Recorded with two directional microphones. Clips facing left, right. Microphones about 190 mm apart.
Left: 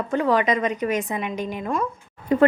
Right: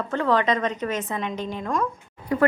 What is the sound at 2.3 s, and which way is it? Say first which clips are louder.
Speech: left 4 dB; 20° left (ahead or behind).